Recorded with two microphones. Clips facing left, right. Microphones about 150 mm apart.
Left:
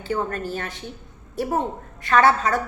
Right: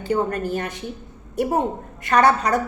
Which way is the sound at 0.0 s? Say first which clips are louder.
Right 4 dB; 15° right (ahead or behind).